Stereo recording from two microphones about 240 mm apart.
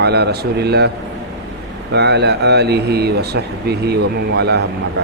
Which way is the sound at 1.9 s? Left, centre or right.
Right.